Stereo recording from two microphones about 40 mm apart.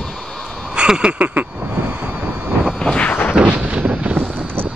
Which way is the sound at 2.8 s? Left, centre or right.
Left.